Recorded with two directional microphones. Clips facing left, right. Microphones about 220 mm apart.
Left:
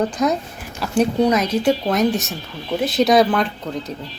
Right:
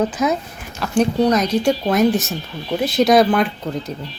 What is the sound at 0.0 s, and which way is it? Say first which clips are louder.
Speech: even; 5° right (ahead or behind).